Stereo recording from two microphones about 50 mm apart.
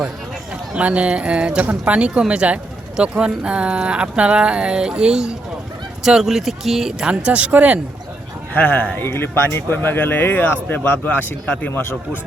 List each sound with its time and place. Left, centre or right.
0.7 s speech: right; by 7.1 s centre
7.3 s speech: right
8.5 s speech: left
9.0 s speech: left
9.6 s speech: left
11.7 s speech: left